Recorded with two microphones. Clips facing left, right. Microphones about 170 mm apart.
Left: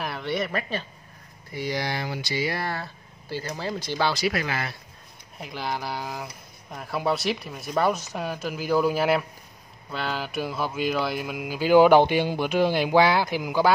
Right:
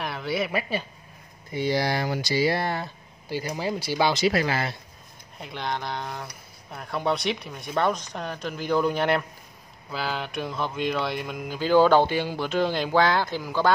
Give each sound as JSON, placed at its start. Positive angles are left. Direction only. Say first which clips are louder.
{"t": 0.0, "sound": "speech", "louder": "even", "side_deg": 0}
{"t": 1.5, "sound": "speech", "louder": "right 4 dB", "side_deg": -30}
{"t": 4.1, "sound": "speech", "louder": "right 3 dB", "side_deg": -25}
{"t": 5.4, "sound": "speech", "louder": "even", "side_deg": 5}